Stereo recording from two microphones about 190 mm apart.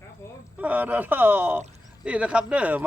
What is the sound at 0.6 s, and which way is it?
Speech, 10° right (ahead or behind).